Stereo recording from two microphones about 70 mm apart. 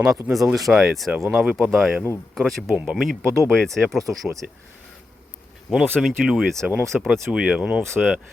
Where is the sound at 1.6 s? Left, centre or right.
Centre.